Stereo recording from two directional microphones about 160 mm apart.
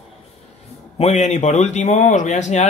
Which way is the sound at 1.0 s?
45° left (ahead or behind).